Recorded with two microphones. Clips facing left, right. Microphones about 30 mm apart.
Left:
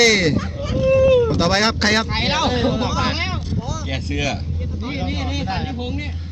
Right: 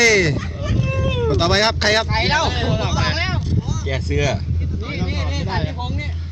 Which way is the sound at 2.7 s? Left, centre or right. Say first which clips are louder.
Left 1 dB; right.